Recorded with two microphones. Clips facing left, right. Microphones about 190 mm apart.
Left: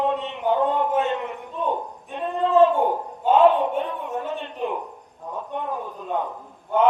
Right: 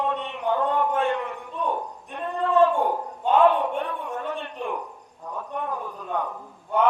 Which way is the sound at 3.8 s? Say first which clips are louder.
Left 2 dB; 20° left (ahead or behind).